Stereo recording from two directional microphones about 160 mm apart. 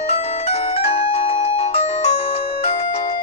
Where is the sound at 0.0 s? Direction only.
40° left (ahead or behind).